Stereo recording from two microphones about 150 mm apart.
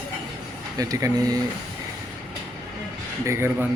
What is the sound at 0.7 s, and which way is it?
Speech, 25° right (ahead or behind).